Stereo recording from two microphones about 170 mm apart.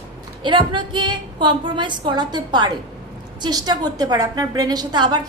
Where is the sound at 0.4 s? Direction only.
30° right (ahead or behind).